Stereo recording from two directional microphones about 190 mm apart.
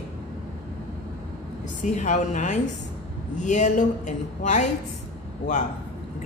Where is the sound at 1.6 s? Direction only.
40° left (ahead or behind).